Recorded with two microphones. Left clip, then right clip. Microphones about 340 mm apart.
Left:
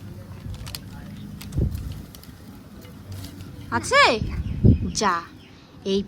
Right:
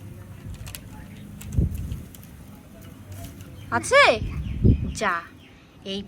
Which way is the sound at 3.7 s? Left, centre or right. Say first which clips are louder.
Right 1 dB; centre.